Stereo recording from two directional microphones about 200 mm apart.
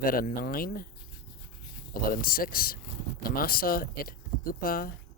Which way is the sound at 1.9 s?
45° left (ahead or behind).